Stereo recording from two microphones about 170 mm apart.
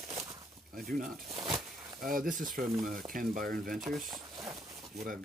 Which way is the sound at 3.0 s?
55° right (ahead or behind).